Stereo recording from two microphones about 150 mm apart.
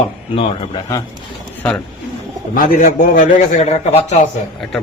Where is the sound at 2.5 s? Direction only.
70° left (ahead or behind); by 4.2 s 50° left (ahead or behind).